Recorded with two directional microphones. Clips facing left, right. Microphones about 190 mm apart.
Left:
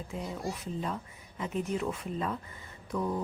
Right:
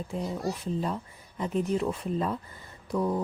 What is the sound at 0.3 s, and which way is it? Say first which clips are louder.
Speech: right 5 dB; 35° right (ahead or behind).